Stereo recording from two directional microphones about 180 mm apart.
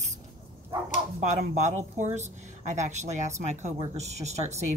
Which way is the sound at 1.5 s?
40° right (ahead or behind).